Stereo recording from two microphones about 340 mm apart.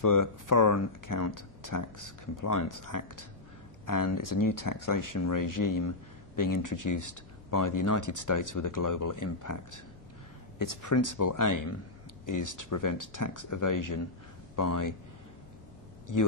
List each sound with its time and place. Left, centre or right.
0.0 s speech: left
16.1 s speech: left